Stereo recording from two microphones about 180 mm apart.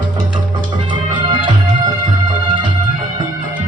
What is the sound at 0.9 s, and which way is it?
Music, 25° right (ahead or behind).